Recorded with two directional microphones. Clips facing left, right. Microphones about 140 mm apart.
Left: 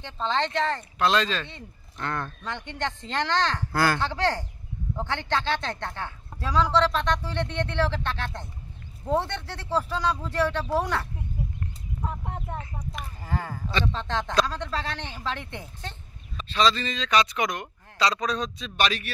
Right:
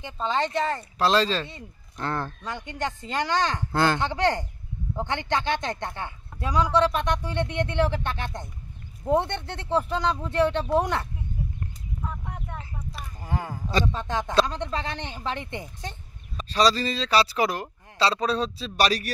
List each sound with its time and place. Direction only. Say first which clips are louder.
0.0 s speech: right 1 dB; 10° right (ahead or behind)
0.9 s speech: right 3 dB; 35° right (ahead or behind)
2.4 s speech: right 1 dB; 10° right (ahead or behind)
12.0 s a sound: left 2 dB; 30° left (ahead or behind)
13.2 s speech: right 1 dB; 15° right (ahead or behind)
16.3 s speech: right 2 dB; 40° right (ahead or behind)